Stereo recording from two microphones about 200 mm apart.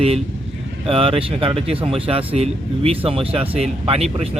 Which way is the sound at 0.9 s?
30° right (ahead or behind).